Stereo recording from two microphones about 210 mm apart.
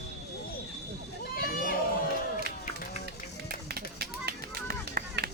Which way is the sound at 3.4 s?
50° right (ahead or behind).